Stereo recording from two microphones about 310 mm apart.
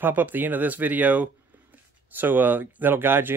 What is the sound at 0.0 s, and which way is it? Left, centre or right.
Speech, centre.